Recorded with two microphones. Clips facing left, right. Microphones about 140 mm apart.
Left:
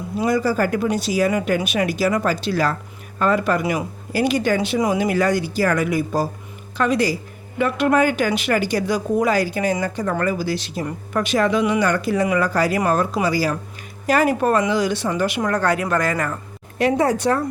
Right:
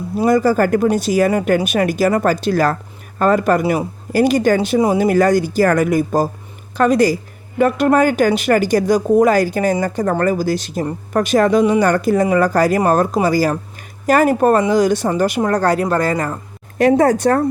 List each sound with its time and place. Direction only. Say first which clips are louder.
0.2 s a woman's voice: right 5 dB; 45° right (ahead or behind)
1.3 s a woman's voice: right 5 dB; 35° right (ahead or behind)
3.6 s a woman's voice: right 5 dB; 30° right (ahead or behind)
4.1 s a woman's voice: right 6 dB; 45° right (ahead or behind)
4.8 s a woman's voice: right 5 dB; 30° right (ahead or behind)
5.0 s a woman's voice: right 6 dB; 45° right (ahead or behind)
16.7 s a woman's voice: right 6 dB; 45° right (ahead or behind)